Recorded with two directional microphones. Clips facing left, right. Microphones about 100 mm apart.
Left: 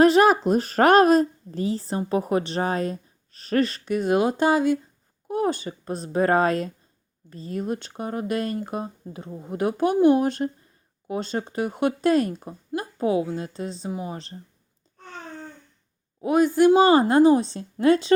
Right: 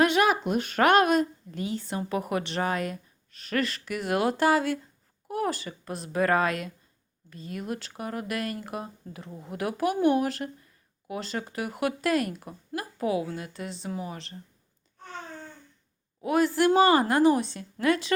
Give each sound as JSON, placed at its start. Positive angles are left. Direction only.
{"t": 0.0, "sound": "a woman's voice", "side_deg": 35}
{"t": 16.2, "sound": "speech", "side_deg": 20}